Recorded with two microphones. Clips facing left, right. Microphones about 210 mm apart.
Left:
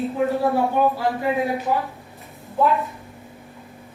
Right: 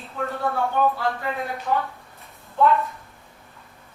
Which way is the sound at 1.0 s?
10° left (ahead or behind).